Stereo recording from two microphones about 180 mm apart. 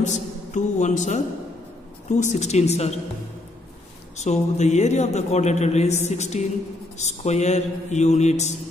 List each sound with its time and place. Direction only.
0.0 s a man's voice: 45° left (ahead or behind)
4.2 s a man's voice: 40° left (ahead or behind)